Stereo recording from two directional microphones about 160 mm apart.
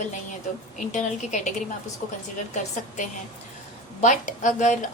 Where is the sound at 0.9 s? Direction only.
50° left (ahead or behind).